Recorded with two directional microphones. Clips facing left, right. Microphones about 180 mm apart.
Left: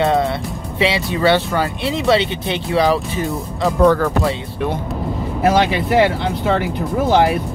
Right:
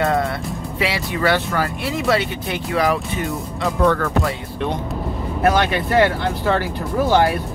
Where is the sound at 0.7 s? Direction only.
25° left (ahead or behind).